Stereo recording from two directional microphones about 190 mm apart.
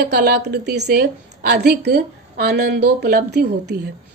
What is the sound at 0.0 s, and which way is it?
A woman's voice, 60° right (ahead or behind).